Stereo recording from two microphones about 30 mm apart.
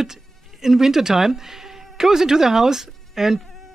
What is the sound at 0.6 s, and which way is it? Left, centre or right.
A man's voice, centre.